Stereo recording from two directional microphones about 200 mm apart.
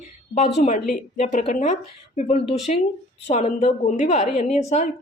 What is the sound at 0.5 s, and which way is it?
Speech, 35° left (ahead or behind).